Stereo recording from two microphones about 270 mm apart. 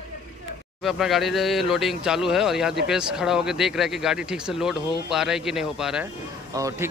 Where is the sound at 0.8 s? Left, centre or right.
Centre.